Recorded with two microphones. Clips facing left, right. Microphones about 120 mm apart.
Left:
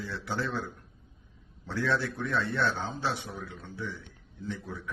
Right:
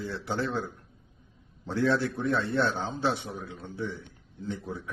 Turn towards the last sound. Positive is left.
turn(degrees=-25)  # may be behind; listen again after turning